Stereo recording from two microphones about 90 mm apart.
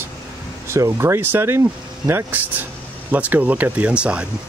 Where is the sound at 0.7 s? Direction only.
30° right (ahead or behind); by 4.2 s 15° right (ahead or behind).